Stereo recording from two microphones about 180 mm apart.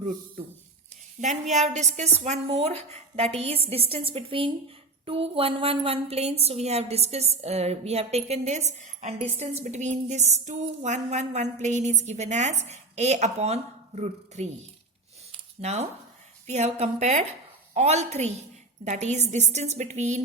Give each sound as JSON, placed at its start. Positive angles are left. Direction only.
{"t": 1.2, "sound": "a woman's voice", "side_deg": -40}
{"t": 15.6, "sound": "a woman's voice", "side_deg": -35}